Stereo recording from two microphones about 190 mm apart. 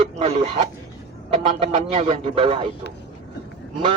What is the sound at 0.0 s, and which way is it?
A man's voice, 30° right (ahead or behind).